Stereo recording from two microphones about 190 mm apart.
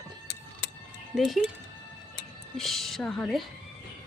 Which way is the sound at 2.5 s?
Centre (ahead or behind).